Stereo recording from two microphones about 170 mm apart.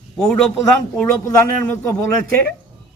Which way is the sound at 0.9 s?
10° left (ahead or behind).